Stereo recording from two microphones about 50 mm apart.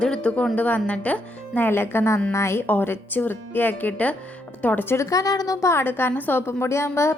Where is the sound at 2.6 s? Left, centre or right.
Left.